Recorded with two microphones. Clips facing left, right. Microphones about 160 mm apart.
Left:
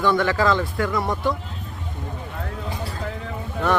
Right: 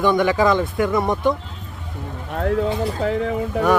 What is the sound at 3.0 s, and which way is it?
Speech, 85° right.